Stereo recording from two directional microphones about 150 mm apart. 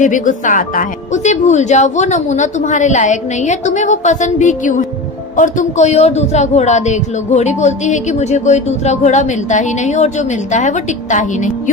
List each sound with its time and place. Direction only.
0.0 s a man's voice: 60° left (ahead or behind)